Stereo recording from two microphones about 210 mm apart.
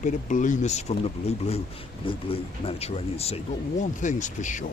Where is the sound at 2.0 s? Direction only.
25° left (ahead or behind).